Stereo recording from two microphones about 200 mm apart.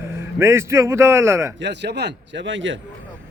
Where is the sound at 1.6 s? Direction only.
60° right (ahead or behind).